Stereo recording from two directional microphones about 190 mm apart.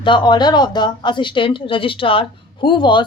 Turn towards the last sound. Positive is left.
turn(degrees=25)  # may be behind; listen again after turning